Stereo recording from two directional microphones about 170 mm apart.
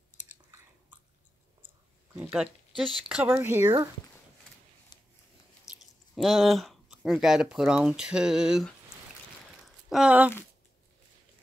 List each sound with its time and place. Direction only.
0.5 s chewing: 15° right (ahead or behind)
2.3 s speech: centre (ahead or behind)
3.3 s speech: 15° right (ahead or behind)
5.7 s speech: centre (ahead or behind)
9.8 s speech: 5° right (ahead or behind)